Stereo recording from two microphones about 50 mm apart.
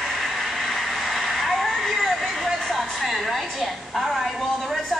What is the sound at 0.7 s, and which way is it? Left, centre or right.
Vehicle, centre.